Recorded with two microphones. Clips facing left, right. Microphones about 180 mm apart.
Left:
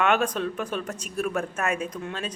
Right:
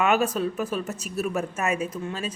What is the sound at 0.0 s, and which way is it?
A woman's voice, 5° right (ahead or behind).